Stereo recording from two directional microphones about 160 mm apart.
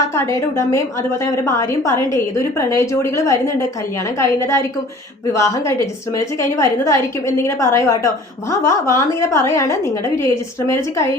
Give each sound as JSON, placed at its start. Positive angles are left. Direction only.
{"t": 0.1, "sound": "a woman's voice", "side_deg": 20}